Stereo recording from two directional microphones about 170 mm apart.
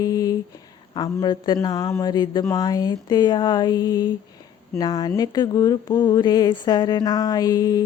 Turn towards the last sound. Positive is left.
turn(degrees=20)  # may be behind; listen again after turning